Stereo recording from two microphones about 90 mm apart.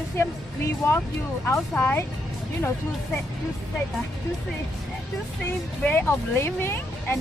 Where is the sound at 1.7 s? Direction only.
20° left (ahead or behind).